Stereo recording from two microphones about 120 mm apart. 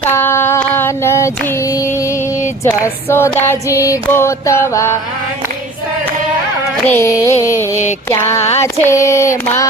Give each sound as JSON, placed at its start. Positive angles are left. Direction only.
{"t": 0.0, "sound": "a sound", "side_deg": 20}
{"t": 2.8, "sound": "female singing", "side_deg": 20}
{"t": 6.8, "sound": "female singing", "side_deg": 20}